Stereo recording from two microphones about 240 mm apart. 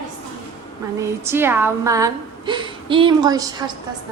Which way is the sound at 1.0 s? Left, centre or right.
Centre.